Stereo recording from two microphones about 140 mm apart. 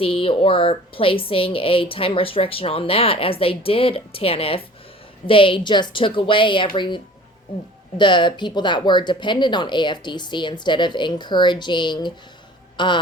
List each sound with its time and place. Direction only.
0.0 s a woman's voice: 40° left (ahead or behind)